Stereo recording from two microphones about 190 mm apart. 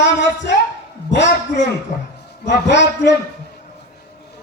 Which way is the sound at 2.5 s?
65° left (ahead or behind).